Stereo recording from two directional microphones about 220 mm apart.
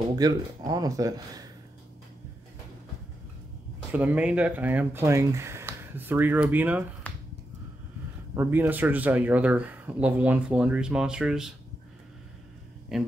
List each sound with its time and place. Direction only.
0.1 s speech: 15° right (ahead or behind)
3.9 s speech: 5° right (ahead or behind)
8.4 s speech: 10° right (ahead or behind)
12.9 s speech: centre (ahead or behind)